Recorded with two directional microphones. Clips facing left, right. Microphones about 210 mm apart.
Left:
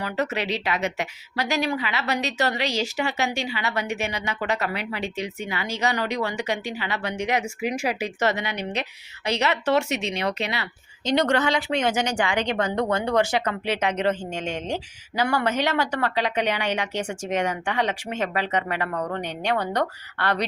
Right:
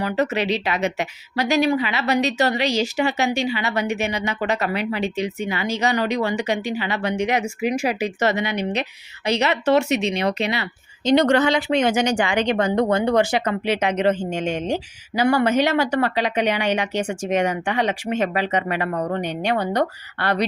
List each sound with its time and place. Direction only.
0.0 s a woman's voice: 20° right (ahead or behind)
18.9 s a woman's voice: 25° right (ahead or behind)
19.1 s speech: 10° right (ahead or behind)